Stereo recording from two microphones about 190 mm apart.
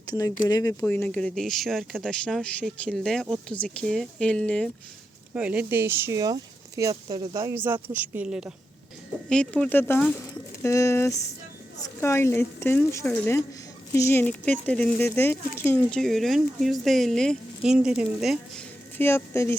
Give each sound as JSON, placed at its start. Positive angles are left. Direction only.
{"t": 0.1, "sound": "speech", "side_deg": 20}
{"t": 5.3, "sound": "speech", "side_deg": -5}
{"t": 18.9, "sound": "speech", "side_deg": 10}